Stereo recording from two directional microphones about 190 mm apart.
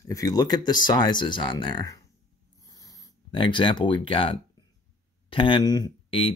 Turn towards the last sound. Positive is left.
turn(degrees=25)  # may be behind; listen again after turning